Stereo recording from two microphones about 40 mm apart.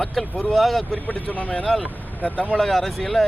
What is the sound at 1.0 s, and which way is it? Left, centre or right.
Speech, left.